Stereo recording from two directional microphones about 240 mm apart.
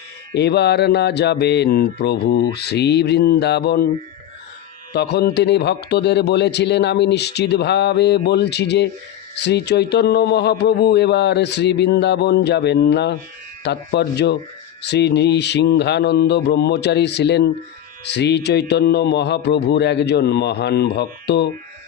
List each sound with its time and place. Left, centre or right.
0.3 s a man's voice: left
4.9 s a man's voice: left